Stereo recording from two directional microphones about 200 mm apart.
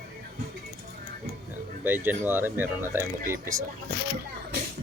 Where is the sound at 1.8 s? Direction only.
10° right (ahead or behind).